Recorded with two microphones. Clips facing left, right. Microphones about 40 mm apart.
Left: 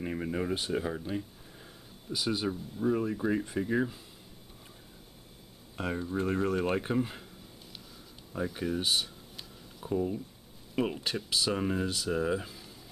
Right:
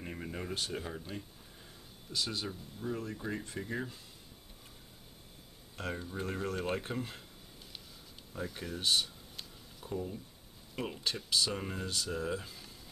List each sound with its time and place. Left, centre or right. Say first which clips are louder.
0.0 s speech: left 8 dB; centre
5.8 s speech: left 6 dB; centre
8.5 s a sound: left 3 dB; centre
9.9 s speech: left 8 dB; centre